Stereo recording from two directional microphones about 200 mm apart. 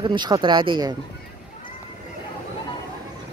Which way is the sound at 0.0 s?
20° right (ahead or behind).